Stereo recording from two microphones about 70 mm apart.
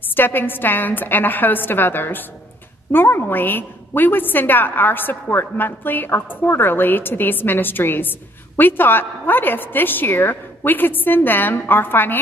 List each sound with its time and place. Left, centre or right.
0.1 s a woman's voice: left